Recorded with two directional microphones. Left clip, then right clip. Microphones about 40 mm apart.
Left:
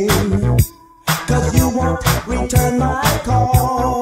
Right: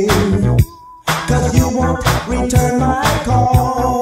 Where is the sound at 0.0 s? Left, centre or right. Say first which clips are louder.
Right 2 dB; right.